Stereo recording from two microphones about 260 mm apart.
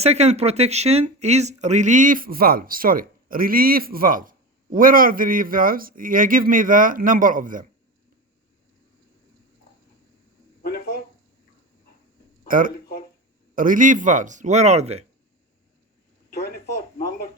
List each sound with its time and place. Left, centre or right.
0.0 s speech: right
10.6 s a sound: left
12.5 s speech: right